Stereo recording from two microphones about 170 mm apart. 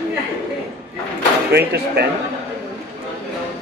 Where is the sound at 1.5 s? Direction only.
75° right (ahead or behind).